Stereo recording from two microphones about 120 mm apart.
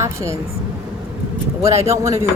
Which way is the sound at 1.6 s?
60° right (ahead or behind).